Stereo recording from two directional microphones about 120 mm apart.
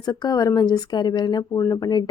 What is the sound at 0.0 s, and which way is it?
Speech, 35° left (ahead or behind).